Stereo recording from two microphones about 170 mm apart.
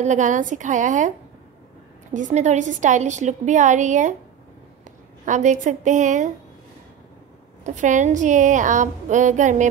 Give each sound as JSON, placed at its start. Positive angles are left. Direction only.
{"t": 0.0, "sound": "a woman's voice", "side_deg": -45}
{"t": 2.1, "sound": "a woman's voice", "side_deg": -45}
{"t": 5.2, "sound": "a woman's voice", "side_deg": -45}
{"t": 7.6, "sound": "a woman's voice", "side_deg": -45}